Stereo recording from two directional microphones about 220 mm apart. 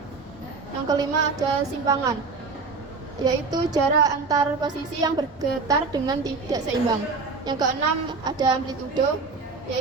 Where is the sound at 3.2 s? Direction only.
15° right (ahead or behind).